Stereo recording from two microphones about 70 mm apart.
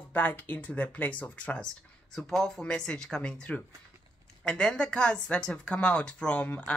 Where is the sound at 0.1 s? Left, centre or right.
Left.